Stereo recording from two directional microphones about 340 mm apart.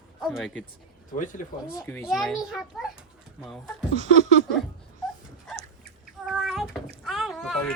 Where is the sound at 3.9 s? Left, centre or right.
Centre.